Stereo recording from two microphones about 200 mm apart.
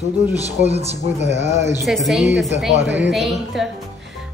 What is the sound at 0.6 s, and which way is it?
Speech, 30° right (ahead or behind).